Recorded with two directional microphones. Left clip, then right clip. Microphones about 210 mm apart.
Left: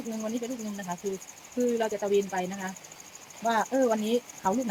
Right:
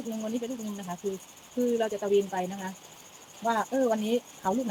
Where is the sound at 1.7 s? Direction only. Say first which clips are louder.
Right 2 dB; 5° left (ahead or behind).